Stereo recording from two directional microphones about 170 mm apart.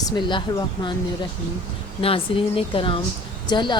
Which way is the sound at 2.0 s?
35° left (ahead or behind).